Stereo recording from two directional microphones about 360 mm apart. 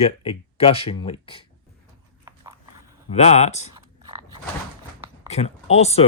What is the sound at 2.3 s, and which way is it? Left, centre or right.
Dog, centre.